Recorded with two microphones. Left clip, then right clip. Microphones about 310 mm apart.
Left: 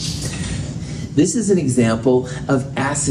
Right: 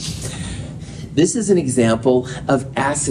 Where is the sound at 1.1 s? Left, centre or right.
Right.